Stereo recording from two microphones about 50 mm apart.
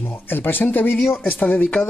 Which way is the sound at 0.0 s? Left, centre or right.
Left.